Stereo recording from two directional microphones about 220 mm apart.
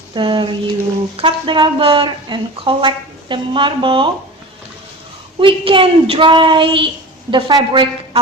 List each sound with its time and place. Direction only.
0.1 s a woman's voice: 20° right (ahead or behind)
5.4 s a woman's voice: 25° right (ahead or behind)